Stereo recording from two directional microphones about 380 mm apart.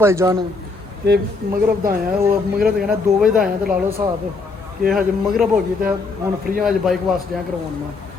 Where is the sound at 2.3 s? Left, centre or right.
Right.